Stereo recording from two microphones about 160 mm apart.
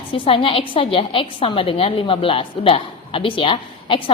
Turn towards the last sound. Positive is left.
turn(degrees=35)  # may be behind; listen again after turning